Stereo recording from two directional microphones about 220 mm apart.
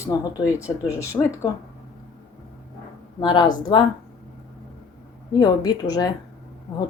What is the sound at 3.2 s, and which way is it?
Speech, 20° left (ahead or behind).